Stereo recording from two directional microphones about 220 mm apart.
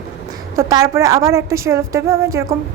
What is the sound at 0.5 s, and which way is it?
A woman's voice, 15° right (ahead or behind).